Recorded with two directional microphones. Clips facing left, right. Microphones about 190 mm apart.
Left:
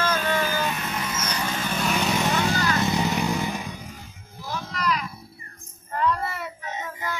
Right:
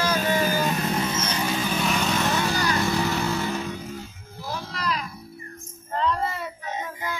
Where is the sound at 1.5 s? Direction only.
5° right (ahead or behind).